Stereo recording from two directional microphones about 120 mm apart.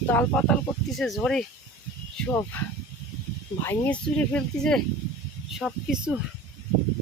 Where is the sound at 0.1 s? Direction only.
15° left (ahead or behind).